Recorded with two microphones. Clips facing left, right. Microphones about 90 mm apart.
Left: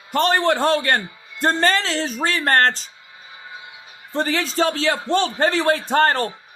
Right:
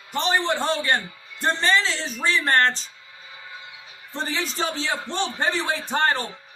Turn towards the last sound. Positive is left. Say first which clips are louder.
# left 5 dB
turn(degrees=40)  # may be behind; listen again after turning